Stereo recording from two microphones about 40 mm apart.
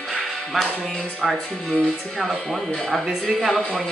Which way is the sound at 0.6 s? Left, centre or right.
Centre.